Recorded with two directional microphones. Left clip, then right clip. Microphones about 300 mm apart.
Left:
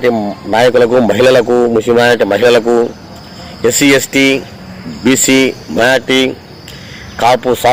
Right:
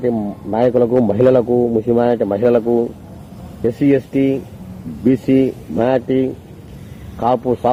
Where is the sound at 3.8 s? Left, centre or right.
Centre.